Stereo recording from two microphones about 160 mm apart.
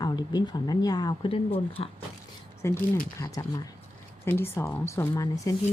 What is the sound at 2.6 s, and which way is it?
A woman's voice, 15° left (ahead or behind).